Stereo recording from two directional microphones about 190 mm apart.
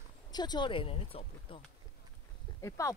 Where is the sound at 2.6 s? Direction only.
15° left (ahead or behind).